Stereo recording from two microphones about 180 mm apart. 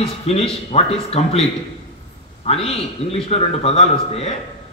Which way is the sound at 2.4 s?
35° left (ahead or behind).